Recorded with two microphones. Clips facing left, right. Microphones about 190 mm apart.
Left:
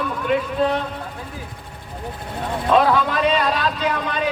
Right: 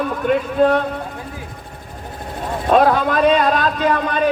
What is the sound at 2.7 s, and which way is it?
A man's voice, 50° right (ahead or behind).